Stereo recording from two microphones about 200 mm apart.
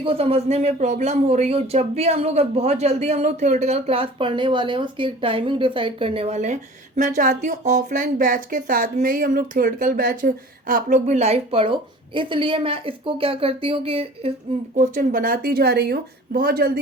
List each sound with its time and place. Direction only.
0.0 s speech: 30° right (ahead or behind)
14.8 s a woman's voice: 45° right (ahead or behind)